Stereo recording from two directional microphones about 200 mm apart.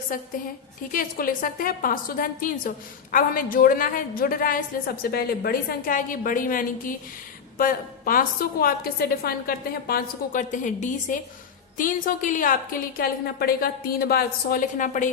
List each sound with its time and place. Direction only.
0.1 s a woman's voice: 45° left (ahead or behind)